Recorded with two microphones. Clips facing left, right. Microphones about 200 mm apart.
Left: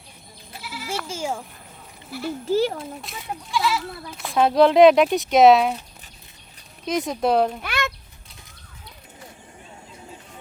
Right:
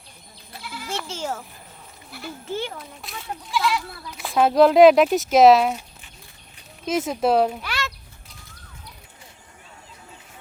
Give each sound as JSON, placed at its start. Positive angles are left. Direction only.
{"t": 0.6, "sound": "goat", "side_deg": 5}
{"t": 2.0, "sound": "speech", "side_deg": 0}
{"t": 2.5, "sound": "a child's voice", "side_deg": 40}
{"t": 3.1, "sound": "speech", "side_deg": 0}
{"t": 6.8, "sound": "speech", "side_deg": -5}
{"t": 7.6, "sound": "a sound", "side_deg": 55}